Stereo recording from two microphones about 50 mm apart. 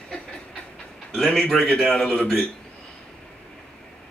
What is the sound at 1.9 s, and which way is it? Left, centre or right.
Speech, centre.